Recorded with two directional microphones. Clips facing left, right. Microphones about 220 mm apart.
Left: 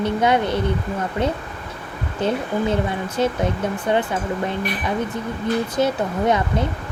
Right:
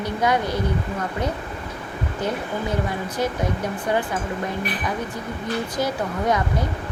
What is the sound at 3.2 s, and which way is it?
Speech, 25° left (ahead or behind).